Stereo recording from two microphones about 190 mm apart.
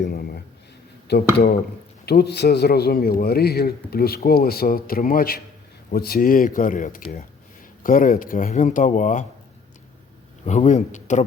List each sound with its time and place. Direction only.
0.0 s a sound: 55° left (ahead or behind)
1.1 s a man's voice: 60° left (ahead or behind); by 9.2 s 40° left (ahead or behind)
10.4 s speech: 40° left (ahead or behind)